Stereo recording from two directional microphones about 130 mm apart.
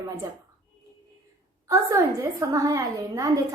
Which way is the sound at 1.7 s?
25° right (ahead or behind).